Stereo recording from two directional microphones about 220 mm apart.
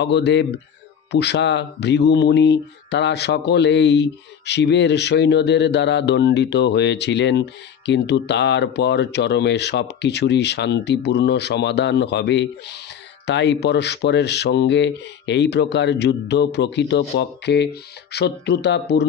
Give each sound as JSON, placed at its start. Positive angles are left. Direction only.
{"t": 0.0, "sound": "speech", "side_deg": 50}